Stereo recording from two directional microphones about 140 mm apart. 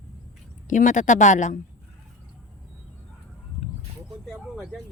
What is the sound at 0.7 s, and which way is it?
Speech, 65° left (ahead or behind).